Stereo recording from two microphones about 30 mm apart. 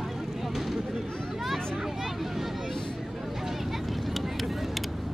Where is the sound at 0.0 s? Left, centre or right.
Centre.